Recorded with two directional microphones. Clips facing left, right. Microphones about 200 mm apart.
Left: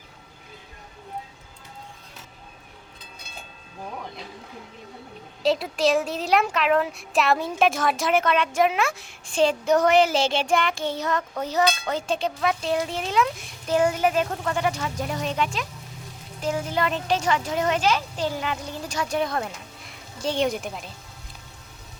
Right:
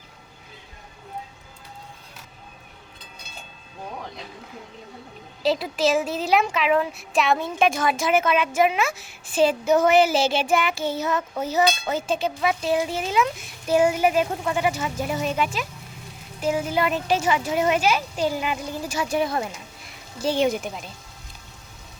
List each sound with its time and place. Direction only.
5.4 s speech: centre (ahead or behind)